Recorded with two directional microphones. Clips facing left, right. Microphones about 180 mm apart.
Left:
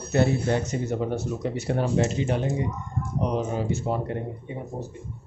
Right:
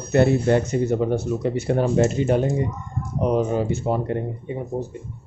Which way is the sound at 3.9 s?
60° right (ahead or behind).